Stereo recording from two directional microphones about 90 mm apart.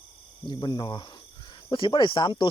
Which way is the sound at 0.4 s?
55° left (ahead or behind).